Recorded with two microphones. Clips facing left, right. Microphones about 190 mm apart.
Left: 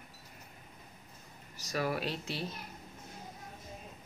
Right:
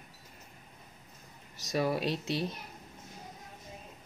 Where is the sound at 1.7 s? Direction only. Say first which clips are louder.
Right 4 dB; 25° right (ahead or behind).